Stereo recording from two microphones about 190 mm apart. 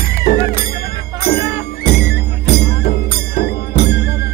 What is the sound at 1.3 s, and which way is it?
Music, 55° left (ahead or behind).